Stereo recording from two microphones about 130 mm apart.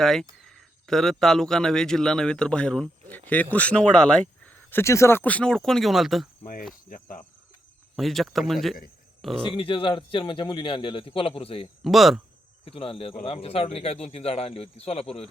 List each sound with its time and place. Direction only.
0.0 s speech: centre (ahead or behind)
6.9 s cricket: 90° left
7.9 s speech: centre (ahead or behind)
9.6 s a man's voice: 40° left (ahead or behind)
11.8 s speech: centre (ahead or behind)
12.6 s speech: 45° left (ahead or behind)